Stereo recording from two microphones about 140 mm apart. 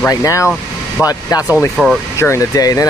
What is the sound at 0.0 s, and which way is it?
Speech, 20° left (ahead or behind).